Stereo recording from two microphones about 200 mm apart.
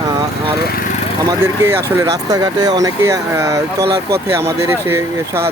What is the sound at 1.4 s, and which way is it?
Speech, 10° right (ahead or behind).